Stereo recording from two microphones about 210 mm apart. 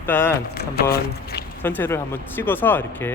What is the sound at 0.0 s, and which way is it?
Speech, 10° left (ahead or behind).